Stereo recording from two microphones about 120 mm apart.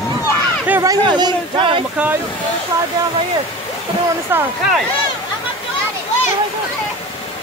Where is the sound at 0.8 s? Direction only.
35° right (ahead or behind).